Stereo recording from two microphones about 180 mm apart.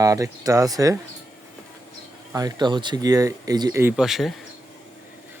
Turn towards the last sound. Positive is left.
turn(degrees=0)  # may be behind; listen again after turning